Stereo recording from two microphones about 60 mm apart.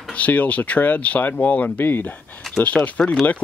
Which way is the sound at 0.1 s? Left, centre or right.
Left.